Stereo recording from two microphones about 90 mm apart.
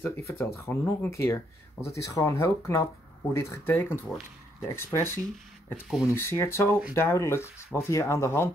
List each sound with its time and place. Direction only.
0.0 s speech: 25° left (ahead or behind)